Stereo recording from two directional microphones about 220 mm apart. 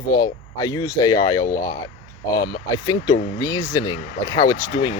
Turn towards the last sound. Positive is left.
turn(degrees=15)  # may be behind; listen again after turning